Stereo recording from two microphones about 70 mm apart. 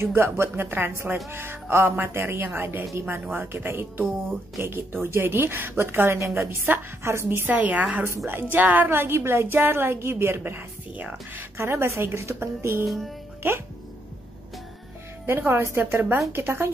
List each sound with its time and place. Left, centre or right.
0.0 s speech: right
11.5 s speech: right
12.8 s speech: centre
15.2 s speech: right